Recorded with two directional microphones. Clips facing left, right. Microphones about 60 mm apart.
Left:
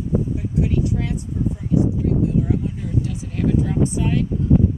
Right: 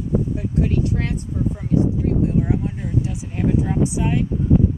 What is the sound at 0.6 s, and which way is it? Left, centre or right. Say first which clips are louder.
Speech: even; right.